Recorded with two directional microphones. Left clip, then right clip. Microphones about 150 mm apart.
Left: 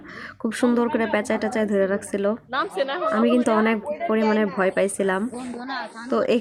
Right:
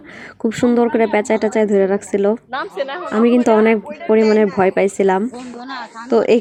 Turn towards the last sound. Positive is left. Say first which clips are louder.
# right 8 dB
turn(degrees=-20)  # may be behind; listen again after turning